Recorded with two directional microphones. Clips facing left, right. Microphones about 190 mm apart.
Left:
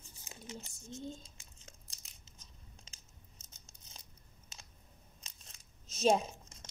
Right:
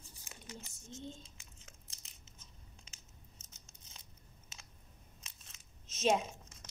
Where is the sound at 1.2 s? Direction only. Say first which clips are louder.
Left 1 dB; 35° left (ahead or behind).